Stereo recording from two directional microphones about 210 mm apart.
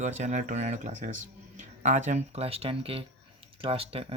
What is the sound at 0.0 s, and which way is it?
Speech, 35° right (ahead or behind).